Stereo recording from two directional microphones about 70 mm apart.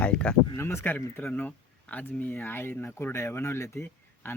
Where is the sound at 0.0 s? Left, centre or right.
Centre.